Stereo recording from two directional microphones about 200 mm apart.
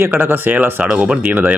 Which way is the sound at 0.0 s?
10° right (ahead or behind).